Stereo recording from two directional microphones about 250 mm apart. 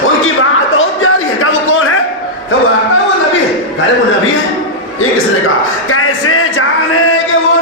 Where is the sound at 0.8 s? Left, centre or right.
Left.